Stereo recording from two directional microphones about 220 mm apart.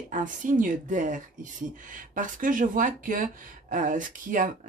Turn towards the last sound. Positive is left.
turn(degrees=-35)  # may be behind; listen again after turning